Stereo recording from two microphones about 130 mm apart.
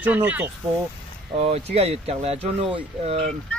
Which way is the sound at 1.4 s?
50° right (ahead or behind).